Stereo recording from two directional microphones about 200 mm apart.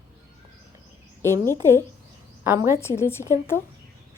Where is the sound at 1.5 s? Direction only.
15° right (ahead or behind).